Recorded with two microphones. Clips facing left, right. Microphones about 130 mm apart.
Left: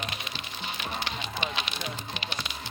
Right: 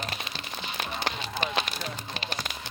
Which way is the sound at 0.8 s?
40° right (ahead or behind).